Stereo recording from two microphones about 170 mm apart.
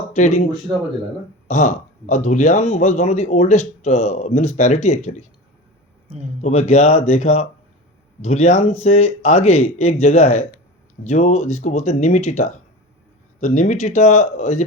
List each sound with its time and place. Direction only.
0.1 s speech: 40° left (ahead or behind)
1.5 s a man's voice: 45° left (ahead or behind)
6.4 s a man's voice: 40° left (ahead or behind)